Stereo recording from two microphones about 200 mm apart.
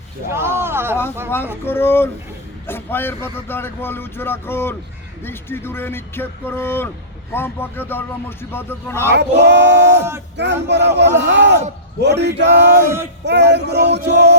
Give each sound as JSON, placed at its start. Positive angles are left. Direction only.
{"t": 0.3, "sound": "a sound", "side_deg": -10}
{"t": 1.6, "sound": "speech", "side_deg": 10}
{"t": 9.1, "sound": "a man's voice", "side_deg": -60}